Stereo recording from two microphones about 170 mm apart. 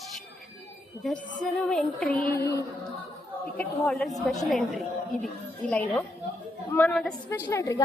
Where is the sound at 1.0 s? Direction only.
Centre (ahead or behind).